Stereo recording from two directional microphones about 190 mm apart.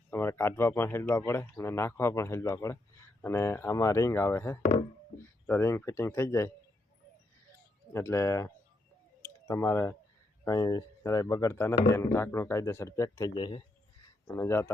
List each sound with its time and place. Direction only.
0.1 s speech: 10° left (ahead or behind)
7.9 s speech: 15° left (ahead or behind)
14.3 s speech: 15° left (ahead or behind)